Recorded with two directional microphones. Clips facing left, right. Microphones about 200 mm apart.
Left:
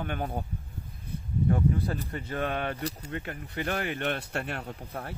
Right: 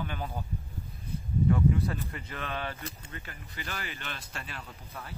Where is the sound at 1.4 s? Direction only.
35° left (ahead or behind).